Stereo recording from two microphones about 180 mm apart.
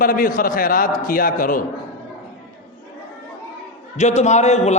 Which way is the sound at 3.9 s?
40° left (ahead or behind).